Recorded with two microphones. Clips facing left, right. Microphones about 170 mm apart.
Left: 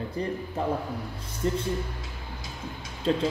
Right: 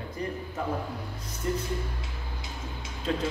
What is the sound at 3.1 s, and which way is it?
Speech, 30° left (ahead or behind).